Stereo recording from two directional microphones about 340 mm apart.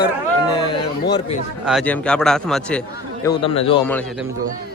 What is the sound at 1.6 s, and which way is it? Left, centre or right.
Speech, centre.